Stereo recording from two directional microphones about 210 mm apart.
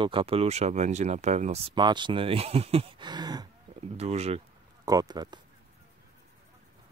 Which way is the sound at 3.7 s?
30° right (ahead or behind).